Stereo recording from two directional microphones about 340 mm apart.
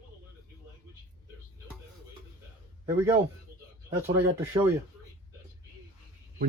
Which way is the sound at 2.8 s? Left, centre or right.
Centre.